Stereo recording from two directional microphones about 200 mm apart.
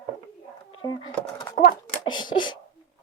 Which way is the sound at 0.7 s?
25° left (ahead or behind).